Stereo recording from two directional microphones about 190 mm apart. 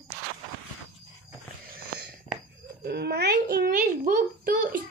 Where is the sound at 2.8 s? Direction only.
60° right (ahead or behind).